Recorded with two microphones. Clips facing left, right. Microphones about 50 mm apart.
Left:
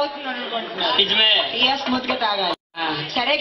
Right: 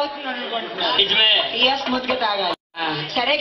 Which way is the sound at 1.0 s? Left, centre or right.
Centre.